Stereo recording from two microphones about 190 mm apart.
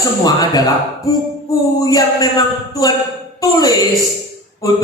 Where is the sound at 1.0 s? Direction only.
20° left (ahead or behind).